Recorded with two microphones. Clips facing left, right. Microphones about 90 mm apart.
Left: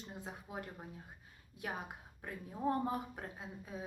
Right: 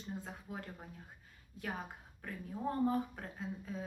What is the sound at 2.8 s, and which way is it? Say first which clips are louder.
A woman's voice: right 4 dB; 10° left (ahead or behind).